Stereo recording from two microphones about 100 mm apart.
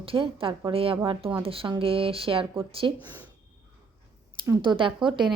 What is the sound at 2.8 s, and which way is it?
Speech, 50° right (ahead or behind).